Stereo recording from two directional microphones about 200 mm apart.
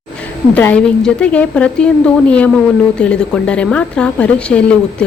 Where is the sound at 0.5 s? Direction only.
5° left (ahead or behind).